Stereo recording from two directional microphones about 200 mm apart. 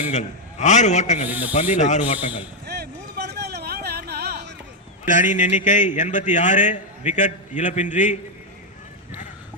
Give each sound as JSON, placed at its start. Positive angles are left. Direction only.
{"t": 0.1, "sound": "a man's voice", "side_deg": 35}
{"t": 1.3, "sound": "a man's voice", "side_deg": -10}
{"t": 1.7, "sound": "a man's voice", "side_deg": 35}
{"t": 2.1, "sound": "a man's voice", "side_deg": -5}
{"t": 2.6, "sound": "a sound", "side_deg": -55}
{"t": 5.0, "sound": "a man's voice", "side_deg": 40}